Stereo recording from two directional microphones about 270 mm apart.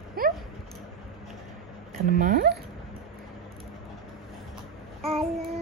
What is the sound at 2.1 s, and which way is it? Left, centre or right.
Speech, right.